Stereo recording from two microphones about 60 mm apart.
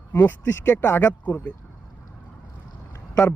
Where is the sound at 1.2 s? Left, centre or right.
Left.